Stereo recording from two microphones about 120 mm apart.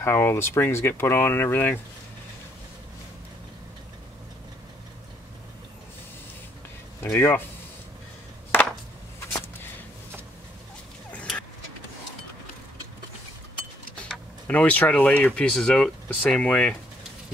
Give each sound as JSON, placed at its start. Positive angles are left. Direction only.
{"t": 0.0, "sound": "speech", "side_deg": 20}
{"t": 7.0, "sound": "speech", "side_deg": 20}
{"t": 8.5, "sound": "chop", "side_deg": 15}
{"t": 14.5, "sound": "speech", "side_deg": 10}